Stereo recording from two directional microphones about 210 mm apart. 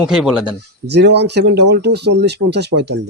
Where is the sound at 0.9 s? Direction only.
55° right (ahead or behind).